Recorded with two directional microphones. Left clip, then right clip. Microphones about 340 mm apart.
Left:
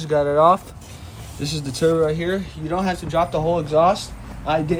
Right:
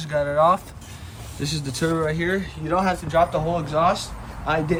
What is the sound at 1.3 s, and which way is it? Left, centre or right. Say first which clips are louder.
Speech: left 2 dB; centre.